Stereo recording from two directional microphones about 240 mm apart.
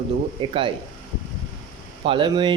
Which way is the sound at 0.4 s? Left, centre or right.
Right.